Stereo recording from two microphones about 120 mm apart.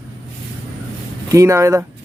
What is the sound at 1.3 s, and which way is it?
Speech, 25° right (ahead or behind).